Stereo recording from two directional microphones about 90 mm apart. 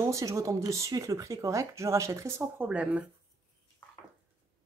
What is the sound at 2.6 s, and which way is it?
Speech, 15° right (ahead or behind).